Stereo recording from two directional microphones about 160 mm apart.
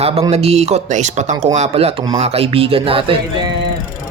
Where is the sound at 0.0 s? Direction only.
40° right (ahead or behind).